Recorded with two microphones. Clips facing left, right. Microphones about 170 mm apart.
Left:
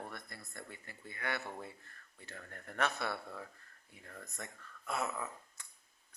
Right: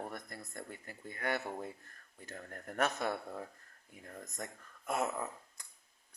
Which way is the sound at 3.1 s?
15° right (ahead or behind).